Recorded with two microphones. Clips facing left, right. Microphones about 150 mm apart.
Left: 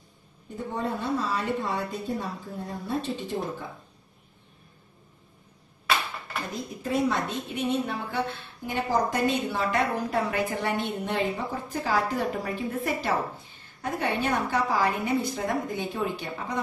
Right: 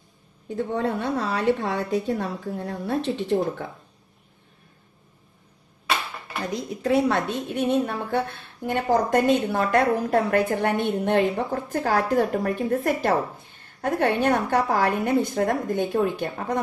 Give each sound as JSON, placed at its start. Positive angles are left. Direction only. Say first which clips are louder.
{"t": 0.7, "sound": "a woman's voice", "louder": "right 2 dB", "side_deg": -70}
{"t": 6.5, "sound": "a woman's voice", "louder": "right 7 dB", "side_deg": -75}